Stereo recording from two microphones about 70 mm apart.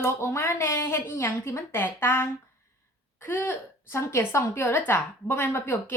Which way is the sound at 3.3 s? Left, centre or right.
Left.